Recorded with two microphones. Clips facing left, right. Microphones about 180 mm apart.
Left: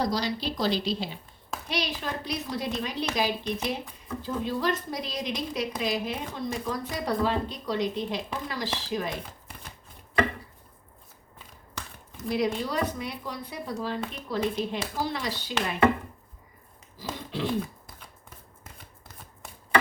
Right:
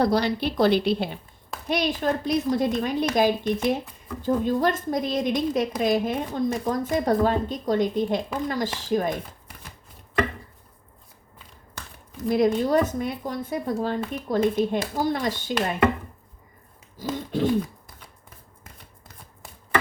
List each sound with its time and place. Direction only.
0.0 s a woman's voice: 55° right (ahead or behind)
12.6 s a woman's voice: 50° right (ahead or behind)
17.0 s a woman's voice: 45° right (ahead or behind)